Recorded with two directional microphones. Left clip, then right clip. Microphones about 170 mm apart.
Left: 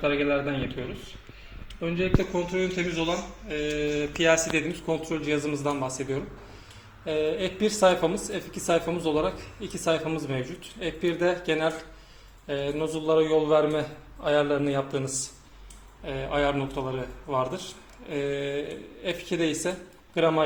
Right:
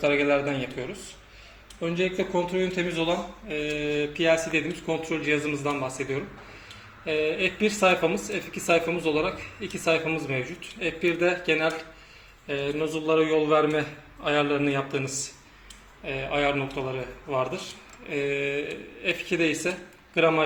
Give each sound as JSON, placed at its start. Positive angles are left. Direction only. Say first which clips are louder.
{"t": 0.0, "sound": "speech", "louder": "right 2 dB", "side_deg": -15}
{"t": 2.3, "sound": "speech", "louder": "right 2 dB", "side_deg": -10}
{"t": 4.1, "sound": "speech", "louder": "left 1 dB", "side_deg": 5}
{"t": 16.0, "sound": "a man's voice", "louder": "right 1 dB", "side_deg": 5}